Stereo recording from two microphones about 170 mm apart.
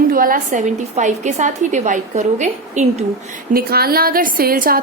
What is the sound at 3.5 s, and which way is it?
A woman's voice, 65° right (ahead or behind).